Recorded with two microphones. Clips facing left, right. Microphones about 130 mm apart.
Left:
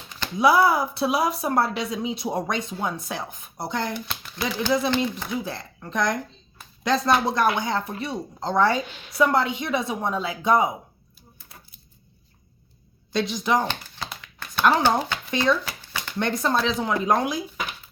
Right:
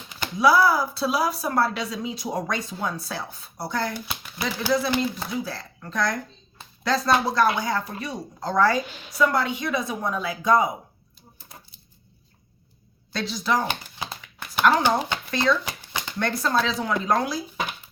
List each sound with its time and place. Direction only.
0.3 s speech: 20° left (ahead or behind)
4.0 s speech: 5° right (ahead or behind)
5.5 s speech: 20° left (ahead or behind)
13.1 s speech: 20° left (ahead or behind)
13.7 s dog: 15° right (ahead or behind)
14.8 s speech: 15° right (ahead or behind)
15.3 s speech: 15° left (ahead or behind)
15.6 s shuffling cards: 15° right (ahead or behind)
16.1 s speech: 20° left (ahead or behind)